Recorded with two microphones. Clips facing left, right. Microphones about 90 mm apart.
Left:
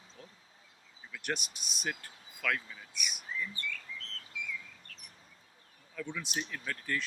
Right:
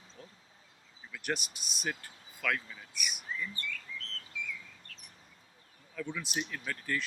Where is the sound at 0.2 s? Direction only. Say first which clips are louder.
Right 1 dB; centre (ahead or behind).